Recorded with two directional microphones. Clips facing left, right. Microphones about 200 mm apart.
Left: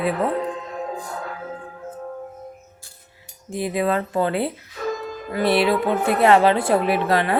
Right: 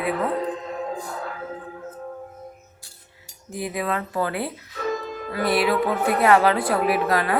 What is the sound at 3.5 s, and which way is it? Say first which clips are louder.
A woman's voice: left 5 dB; 25° left (ahead or behind).